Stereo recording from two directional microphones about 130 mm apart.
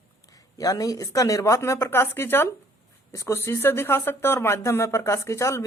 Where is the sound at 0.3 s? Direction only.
30° left (ahead or behind).